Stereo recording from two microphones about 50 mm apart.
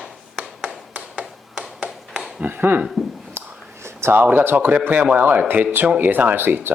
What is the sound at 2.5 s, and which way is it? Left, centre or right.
Speech, right.